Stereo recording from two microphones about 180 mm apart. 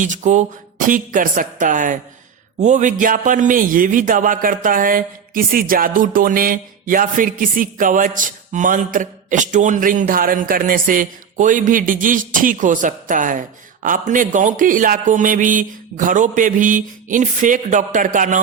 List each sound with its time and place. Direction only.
0.0 s a man's voice: 45° right (ahead or behind)